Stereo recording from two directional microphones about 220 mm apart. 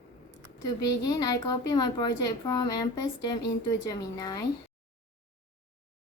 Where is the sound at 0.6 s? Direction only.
15° left (ahead or behind).